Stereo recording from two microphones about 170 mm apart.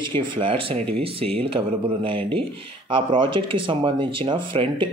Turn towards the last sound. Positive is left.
turn(degrees=-30)  # may be behind; listen again after turning